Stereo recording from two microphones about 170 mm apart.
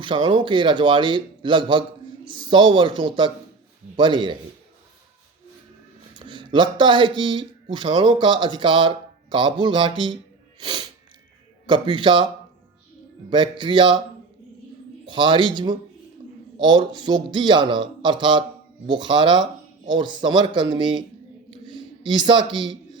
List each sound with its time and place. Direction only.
0.0 s speech: 30° right (ahead or behind)
6.1 s speech: 30° right (ahead or behind)
13.3 s speech: 30° right (ahead or behind)
15.0 s speech: 30° right (ahead or behind)
21.7 s a sound: 25° right (ahead or behind)